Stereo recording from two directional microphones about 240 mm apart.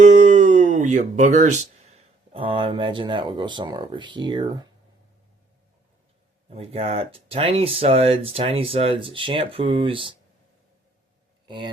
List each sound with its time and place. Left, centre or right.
0.0 s a sound: right
2.3 s speech: right
6.5 s speech: right
11.4 s speech: centre